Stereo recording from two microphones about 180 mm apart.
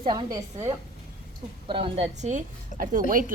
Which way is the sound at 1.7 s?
30° right (ahead or behind).